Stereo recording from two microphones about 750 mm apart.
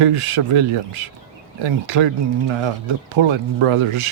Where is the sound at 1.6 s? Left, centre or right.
Right.